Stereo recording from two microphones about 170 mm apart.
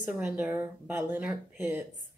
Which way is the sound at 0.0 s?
10° right (ahead or behind).